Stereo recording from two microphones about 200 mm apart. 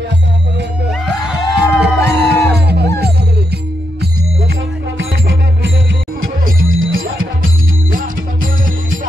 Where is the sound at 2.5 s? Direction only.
55° right (ahead or behind).